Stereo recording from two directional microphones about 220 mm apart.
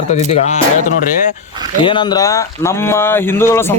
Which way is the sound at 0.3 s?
30° left (ahead or behind).